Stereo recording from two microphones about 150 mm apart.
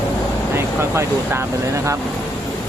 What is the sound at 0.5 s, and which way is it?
Speech, 15° right (ahead or behind).